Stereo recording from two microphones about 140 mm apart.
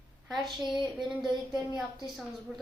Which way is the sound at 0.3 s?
Centre (ahead or behind).